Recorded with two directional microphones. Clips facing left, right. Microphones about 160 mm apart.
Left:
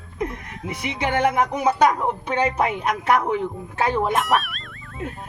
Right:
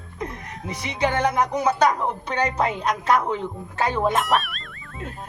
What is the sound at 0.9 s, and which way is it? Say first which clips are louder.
A woman's voice: left 1 dB; 15° left (ahead or behind).